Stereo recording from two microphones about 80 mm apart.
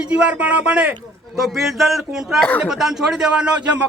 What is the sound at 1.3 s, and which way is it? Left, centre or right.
A man's voice, centre.